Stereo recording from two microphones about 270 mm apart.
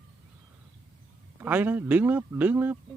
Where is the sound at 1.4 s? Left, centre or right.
Centre.